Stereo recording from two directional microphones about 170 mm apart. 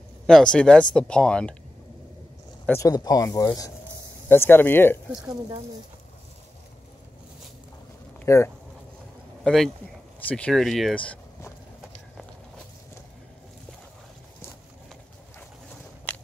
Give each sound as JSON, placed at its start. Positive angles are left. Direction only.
{"t": 0.3, "sound": "speech", "side_deg": 5}
{"t": 2.6, "sound": "speech", "side_deg": 15}
{"t": 8.3, "sound": "speech", "side_deg": 15}
{"t": 9.4, "sound": "speech", "side_deg": 0}
{"t": 16.1, "sound": "biting", "side_deg": 10}